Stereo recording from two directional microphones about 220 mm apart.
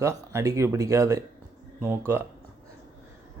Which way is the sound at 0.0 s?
10° right (ahead or behind).